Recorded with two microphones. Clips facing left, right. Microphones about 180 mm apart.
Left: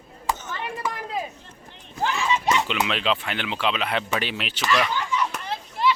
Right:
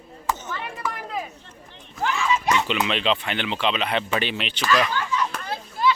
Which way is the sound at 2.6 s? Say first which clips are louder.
Right 1 dB; centre (ahead or behind).